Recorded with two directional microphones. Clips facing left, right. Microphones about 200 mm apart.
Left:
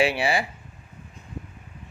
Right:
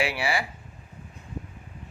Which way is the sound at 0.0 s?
25° left (ahead or behind).